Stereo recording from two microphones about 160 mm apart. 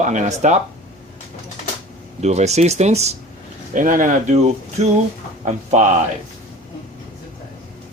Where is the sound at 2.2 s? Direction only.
45° right (ahead or behind).